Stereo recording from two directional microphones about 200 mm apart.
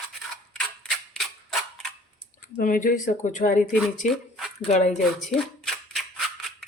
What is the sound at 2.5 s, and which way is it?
Speech, 45° left (ahead or behind).